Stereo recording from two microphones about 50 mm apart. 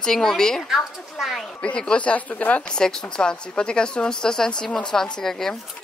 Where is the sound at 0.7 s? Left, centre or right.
Centre.